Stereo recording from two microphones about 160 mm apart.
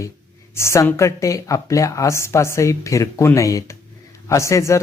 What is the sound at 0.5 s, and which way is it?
Speech, 15° left (ahead or behind).